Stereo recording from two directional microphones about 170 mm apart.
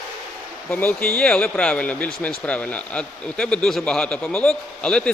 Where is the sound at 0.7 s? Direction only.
10° left (ahead or behind).